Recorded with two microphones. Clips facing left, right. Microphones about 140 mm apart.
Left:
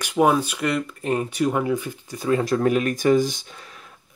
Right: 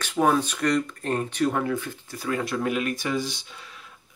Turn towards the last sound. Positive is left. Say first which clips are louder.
# left 8 dB
turn(degrees=45)  # may be behind; listen again after turning